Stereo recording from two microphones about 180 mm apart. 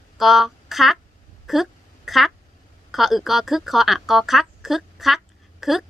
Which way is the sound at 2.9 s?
Centre (ahead or behind).